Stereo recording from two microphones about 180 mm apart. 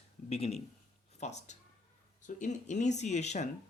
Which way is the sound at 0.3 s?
35° left (ahead or behind).